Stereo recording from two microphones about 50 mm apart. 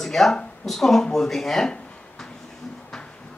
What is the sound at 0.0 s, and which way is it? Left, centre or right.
Speech, centre.